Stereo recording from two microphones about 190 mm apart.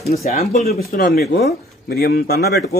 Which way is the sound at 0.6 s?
50° left (ahead or behind).